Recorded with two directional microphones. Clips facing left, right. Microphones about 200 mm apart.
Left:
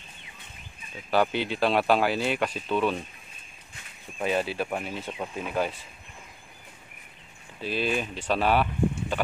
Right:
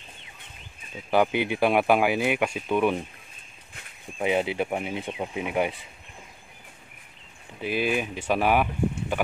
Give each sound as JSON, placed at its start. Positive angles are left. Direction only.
{"t": 1.1, "sound": "speech", "side_deg": -15}
{"t": 4.2, "sound": "speech", "side_deg": -20}
{"t": 7.6, "sound": "speech", "side_deg": -15}